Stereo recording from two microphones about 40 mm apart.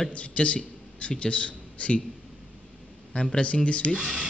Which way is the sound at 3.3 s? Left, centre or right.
Left.